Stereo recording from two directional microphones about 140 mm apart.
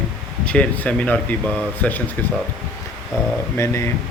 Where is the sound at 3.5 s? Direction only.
20° left (ahead or behind).